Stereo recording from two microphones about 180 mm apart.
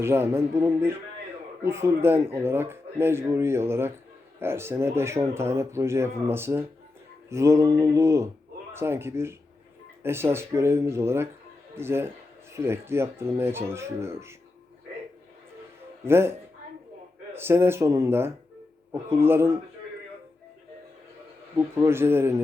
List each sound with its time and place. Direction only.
0.0 s speech: 15° right (ahead or behind)
16.0 s speech: 15° right (ahead or behind)
17.3 s speech: 15° right (ahead or behind)
21.8 s speech: 15° right (ahead or behind)